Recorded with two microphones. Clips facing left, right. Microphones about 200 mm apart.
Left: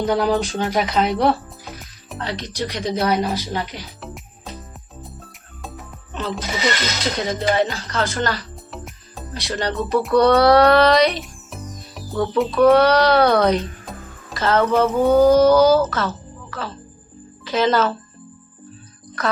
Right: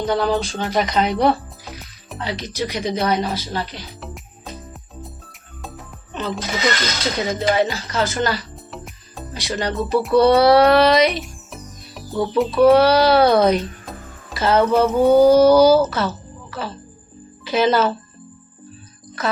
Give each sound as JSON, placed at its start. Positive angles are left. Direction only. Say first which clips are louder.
{"t": 0.0, "sound": "speech", "louder": "left 1 dB", "side_deg": 10}
{"t": 0.7, "sound": "speech", "louder": "right 2 dB", "side_deg": 5}
{"t": 3.3, "sound": "speech", "louder": "left 1 dB", "side_deg": 15}
{"t": 4.0, "sound": "jingle bell", "louder": "even", "side_deg": 0}
{"t": 5.0, "sound": "speech", "louder": "left 1 dB", "side_deg": 0}
{"t": 10.6, "sound": "music", "louder": "even", "side_deg": -5}
{"t": 12.1, "sound": "speech", "louder": "even", "side_deg": -15}
{"t": 12.4, "sound": "speech", "louder": "right 1 dB", "side_deg": -5}
{"t": 14.7, "sound": "mantra", "louder": "right 2 dB", "side_deg": 0}
{"t": 15.4, "sound": "speech", "louder": "right 2 dB", "side_deg": -10}